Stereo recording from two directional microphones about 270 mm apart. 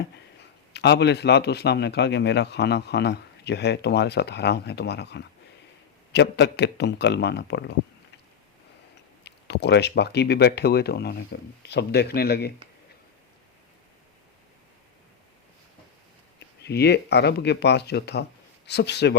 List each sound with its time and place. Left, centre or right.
0.7 s a man's voice: left
9.2 s a man's voice: left
16.6 s a man's voice: left